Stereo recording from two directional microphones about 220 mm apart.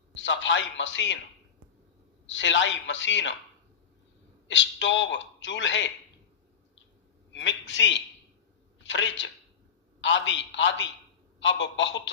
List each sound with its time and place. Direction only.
0.1 s a man's voice: 60° left (ahead or behind)
2.2 s a man's voice: 55° left (ahead or behind)
4.4 s a man's voice: 55° left (ahead or behind)
7.3 s a man's voice: 55° left (ahead or behind)